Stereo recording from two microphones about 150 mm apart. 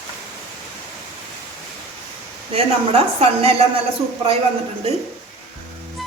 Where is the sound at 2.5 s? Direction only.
40° right (ahead or behind).